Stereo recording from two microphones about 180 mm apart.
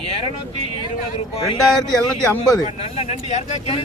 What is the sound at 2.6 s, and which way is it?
Speech, 35° left (ahead or behind).